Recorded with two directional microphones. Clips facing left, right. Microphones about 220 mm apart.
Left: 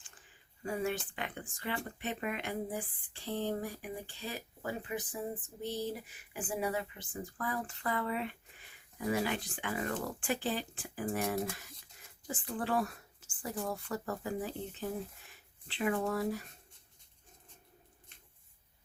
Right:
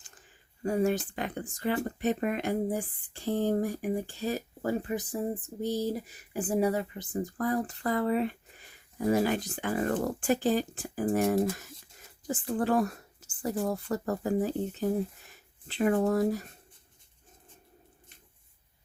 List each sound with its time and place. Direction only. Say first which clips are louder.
0.6 s a woman's voice: right 8 dB; 40° right (ahead or behind)